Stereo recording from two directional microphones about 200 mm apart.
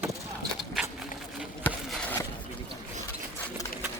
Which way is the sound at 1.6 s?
10° left (ahead or behind).